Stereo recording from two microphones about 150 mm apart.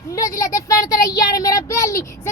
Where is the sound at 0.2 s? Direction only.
20° left (ahead or behind).